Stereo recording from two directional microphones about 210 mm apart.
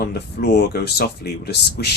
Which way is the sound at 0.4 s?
45° left (ahead or behind).